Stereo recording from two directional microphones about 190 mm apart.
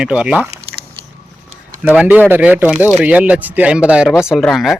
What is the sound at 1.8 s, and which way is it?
Speech, 10° right (ahead or behind).